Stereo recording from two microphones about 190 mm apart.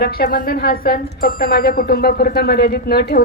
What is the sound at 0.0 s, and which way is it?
Speech, 50° left (ahead or behind).